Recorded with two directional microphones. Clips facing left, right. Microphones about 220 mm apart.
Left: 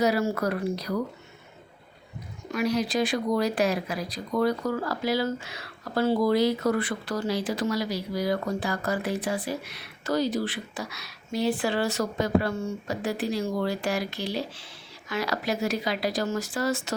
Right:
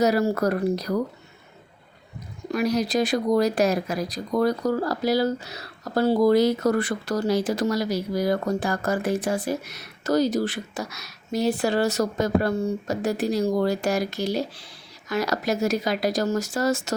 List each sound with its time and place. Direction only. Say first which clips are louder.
0.0 s speech: right 4 dB; 40° right (ahead or behind)
2.5 s speech: right 3 dB; 40° right (ahead or behind)